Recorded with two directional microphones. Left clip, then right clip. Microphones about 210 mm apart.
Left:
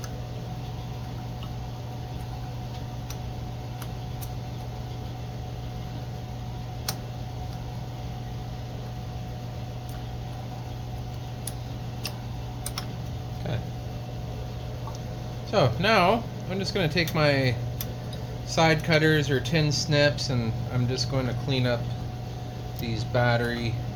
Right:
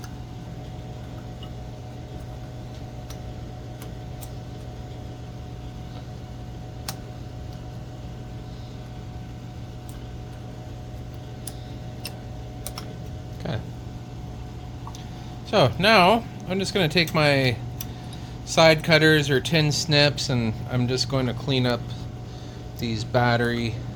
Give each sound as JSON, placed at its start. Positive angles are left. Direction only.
{"t": 15.4, "sound": "speech", "side_deg": -45}
{"t": 22.8, "sound": "speech", "side_deg": -50}